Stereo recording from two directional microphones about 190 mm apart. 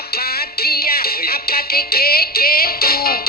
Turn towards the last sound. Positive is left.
turn(degrees=55)  # may be behind; listen again after turning